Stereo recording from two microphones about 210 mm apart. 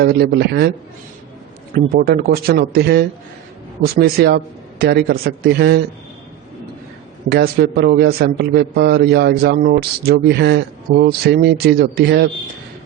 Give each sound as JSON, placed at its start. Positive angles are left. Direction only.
{"t": 0.0, "sound": "a man's voice", "side_deg": -45}
{"t": 1.7, "sound": "a man's voice", "side_deg": -45}
{"t": 7.3, "sound": "a man's voice", "side_deg": -50}